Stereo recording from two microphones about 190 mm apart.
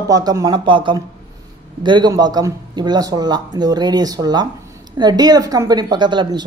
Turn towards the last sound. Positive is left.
turn(degrees=-25)  # may be behind; listen again after turning